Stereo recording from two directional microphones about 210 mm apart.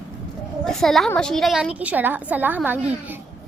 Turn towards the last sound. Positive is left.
turn(degrees=-10)  # may be behind; listen again after turning